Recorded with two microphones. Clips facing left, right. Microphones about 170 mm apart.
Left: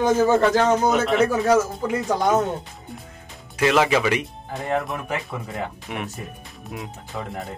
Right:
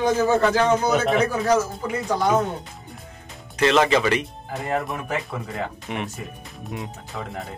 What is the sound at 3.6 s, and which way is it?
Speech, 10° left (ahead or behind).